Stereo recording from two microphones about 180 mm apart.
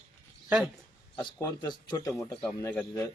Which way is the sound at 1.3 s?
25° left (ahead or behind).